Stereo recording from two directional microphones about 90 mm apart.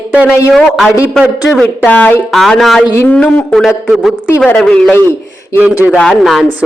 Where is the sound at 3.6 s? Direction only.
Centre (ahead or behind).